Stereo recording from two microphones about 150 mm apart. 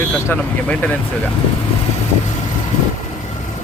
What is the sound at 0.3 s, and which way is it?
Speech, 10° left (ahead or behind).